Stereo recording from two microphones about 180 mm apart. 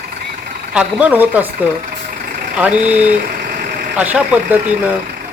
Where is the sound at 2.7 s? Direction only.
40° right (ahead or behind).